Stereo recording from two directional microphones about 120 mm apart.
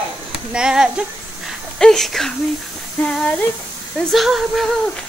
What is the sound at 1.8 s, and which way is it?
Speech, 5° left (ahead or behind).